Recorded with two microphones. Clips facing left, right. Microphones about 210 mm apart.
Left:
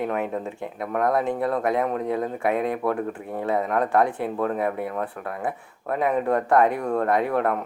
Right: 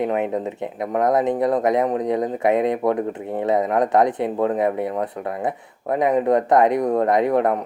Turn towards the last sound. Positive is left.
turn(degrees=-20)  # may be behind; listen again after turning